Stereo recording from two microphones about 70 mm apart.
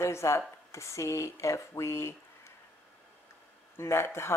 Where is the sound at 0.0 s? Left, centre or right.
Left.